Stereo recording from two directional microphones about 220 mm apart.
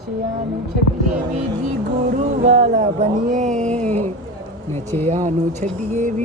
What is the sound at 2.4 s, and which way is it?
Speech, 30° right (ahead or behind).